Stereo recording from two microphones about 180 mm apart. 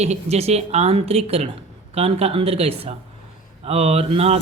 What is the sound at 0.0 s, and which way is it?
A woman's voice, 35° right (ahead or behind).